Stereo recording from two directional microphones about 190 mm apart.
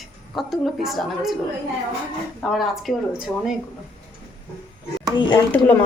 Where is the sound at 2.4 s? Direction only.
Centre (ahead or behind).